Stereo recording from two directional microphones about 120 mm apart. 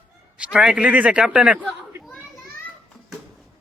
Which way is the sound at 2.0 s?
Centre (ahead or behind).